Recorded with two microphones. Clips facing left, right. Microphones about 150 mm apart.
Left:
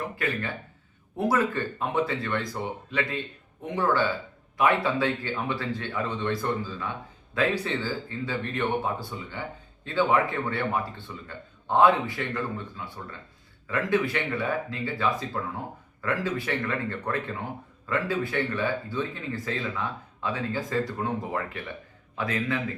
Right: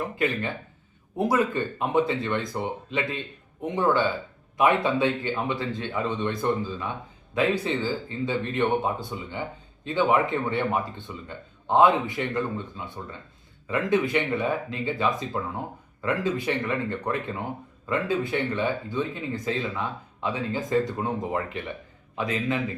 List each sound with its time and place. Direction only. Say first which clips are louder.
0.2 s speech: right 6 dB; 20° right (ahead or behind)